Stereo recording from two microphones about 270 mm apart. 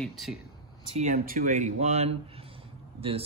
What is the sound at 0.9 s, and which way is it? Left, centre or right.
Speech, right.